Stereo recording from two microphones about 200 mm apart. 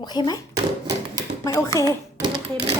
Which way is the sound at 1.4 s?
15° left (ahead or behind).